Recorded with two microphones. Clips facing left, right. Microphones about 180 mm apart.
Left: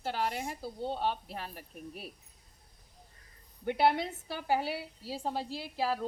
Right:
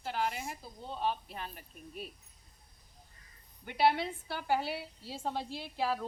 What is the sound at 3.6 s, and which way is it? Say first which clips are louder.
Speech: left 1 dB; 45° left (ahead or behind).